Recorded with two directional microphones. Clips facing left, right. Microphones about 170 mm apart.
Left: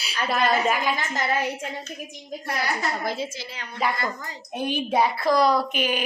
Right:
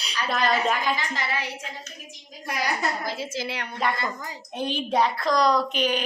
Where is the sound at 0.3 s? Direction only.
5° left (ahead or behind).